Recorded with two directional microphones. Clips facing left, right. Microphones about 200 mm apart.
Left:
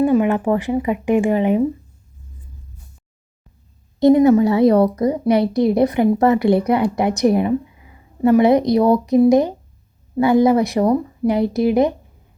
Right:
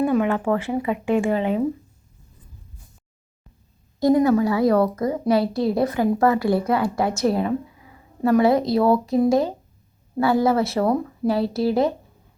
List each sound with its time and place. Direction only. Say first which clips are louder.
0.2 s speech: left 4 dB; 15° left (ahead or behind)
4.0 s a woman's voice: left 5 dB; 20° left (ahead or behind)